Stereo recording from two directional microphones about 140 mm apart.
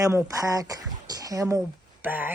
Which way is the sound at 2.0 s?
15° right (ahead or behind).